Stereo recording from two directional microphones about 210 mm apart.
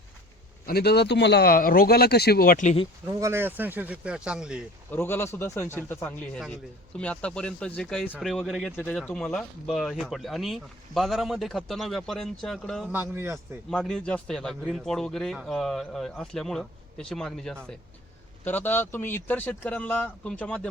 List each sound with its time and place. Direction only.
0.6 s a man's voice: 45° left (ahead or behind)
3.1 s speech: 15° right (ahead or behind)
4.9 s speech: 10° left (ahead or behind)
12.9 s speech: 10° right (ahead or behind)
13.7 s speech: 5° left (ahead or behind)